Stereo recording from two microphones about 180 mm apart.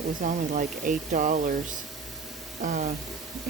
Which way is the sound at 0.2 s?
45° right (ahead or behind).